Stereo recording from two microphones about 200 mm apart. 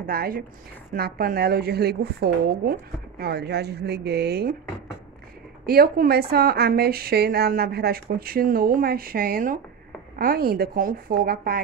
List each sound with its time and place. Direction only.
0.0 s a woman's voice: 45° right (ahead or behind)
5.7 s a woman's voice: 50° right (ahead or behind)